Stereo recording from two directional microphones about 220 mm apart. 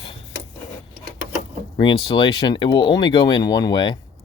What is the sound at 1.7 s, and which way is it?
Speech, 20° left (ahead or behind).